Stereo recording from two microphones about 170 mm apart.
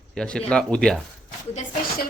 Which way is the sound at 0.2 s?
5° left (ahead or behind).